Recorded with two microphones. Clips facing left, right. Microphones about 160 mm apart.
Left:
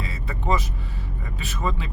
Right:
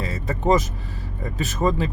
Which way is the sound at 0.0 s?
40° right (ahead or behind).